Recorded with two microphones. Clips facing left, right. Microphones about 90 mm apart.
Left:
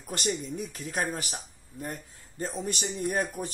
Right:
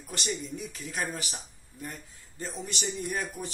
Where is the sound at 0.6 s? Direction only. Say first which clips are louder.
Left 3 dB; 45° left (ahead or behind).